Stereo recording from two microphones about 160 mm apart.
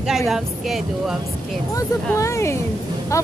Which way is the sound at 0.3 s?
Centre (ahead or behind).